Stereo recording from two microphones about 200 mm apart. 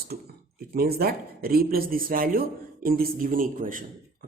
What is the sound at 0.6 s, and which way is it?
Speech, 50° right (ahead or behind).